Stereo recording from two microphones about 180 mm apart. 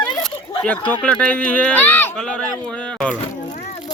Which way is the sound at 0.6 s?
5° left (ahead or behind).